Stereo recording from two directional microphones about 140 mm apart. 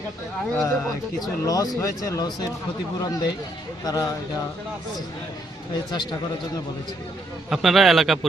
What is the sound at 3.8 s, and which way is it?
Speech, 25° left (ahead or behind).